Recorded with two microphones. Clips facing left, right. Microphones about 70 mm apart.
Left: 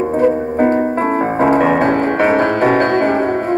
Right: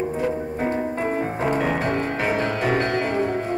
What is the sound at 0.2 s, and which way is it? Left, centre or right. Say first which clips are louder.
Music: left 11 dB; left.